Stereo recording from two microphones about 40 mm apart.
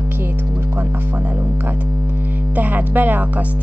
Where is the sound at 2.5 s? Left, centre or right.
Right.